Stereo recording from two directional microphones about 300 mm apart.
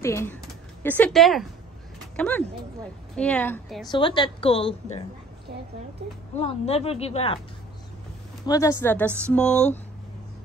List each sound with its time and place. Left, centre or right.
0.0 s a woman's voice: centre
3.9 s a woman's voice: centre
6.3 s speech: centre
8.5 s a woman's voice: centre